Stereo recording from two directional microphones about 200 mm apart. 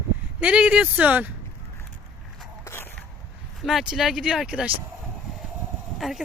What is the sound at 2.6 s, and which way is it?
Walk, 10° left (ahead or behind).